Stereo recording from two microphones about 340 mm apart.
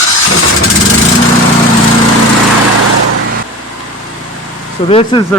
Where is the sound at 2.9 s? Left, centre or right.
Right.